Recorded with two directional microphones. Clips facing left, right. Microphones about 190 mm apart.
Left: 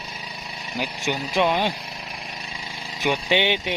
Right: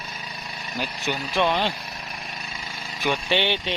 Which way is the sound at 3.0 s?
15° left (ahead or behind).